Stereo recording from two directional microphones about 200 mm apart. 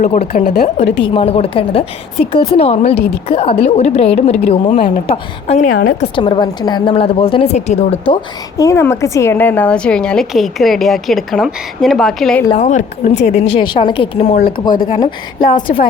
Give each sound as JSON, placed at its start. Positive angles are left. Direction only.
{"t": 0.0, "sound": "a woman's voice", "side_deg": 40}
{"t": 0.9, "sound": "a woman's voice", "side_deg": 25}
{"t": 6.1, "sound": "a woman's voice", "side_deg": 20}
{"t": 8.1, "sound": "a woman's voice", "side_deg": 15}
{"t": 12.5, "sound": "a woman's voice", "side_deg": 35}
{"t": 13.5, "sound": "a woman's voice", "side_deg": 25}
{"t": 14.7, "sound": "a woman's voice", "side_deg": 40}